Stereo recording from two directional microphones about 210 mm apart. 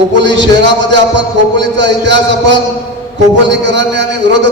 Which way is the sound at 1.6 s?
55° right (ahead or behind).